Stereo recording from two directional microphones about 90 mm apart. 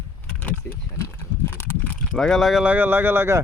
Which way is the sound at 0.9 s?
30° left (ahead or behind).